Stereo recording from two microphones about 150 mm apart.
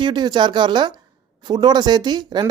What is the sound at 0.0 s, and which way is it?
Speech, 30° right (ahead or behind).